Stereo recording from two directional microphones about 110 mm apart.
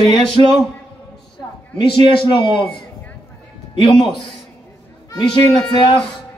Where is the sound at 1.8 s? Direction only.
50° left (ahead or behind).